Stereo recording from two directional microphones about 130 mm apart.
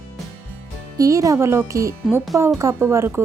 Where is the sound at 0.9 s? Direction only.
25° right (ahead or behind).